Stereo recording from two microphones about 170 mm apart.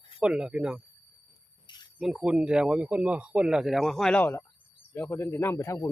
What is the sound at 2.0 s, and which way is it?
Speech, 5° right (ahead or behind).